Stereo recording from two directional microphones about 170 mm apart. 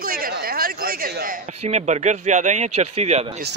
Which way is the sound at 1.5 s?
40° right (ahead or behind).